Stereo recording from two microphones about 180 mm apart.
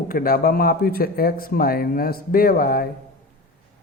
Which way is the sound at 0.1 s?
55° left (ahead or behind).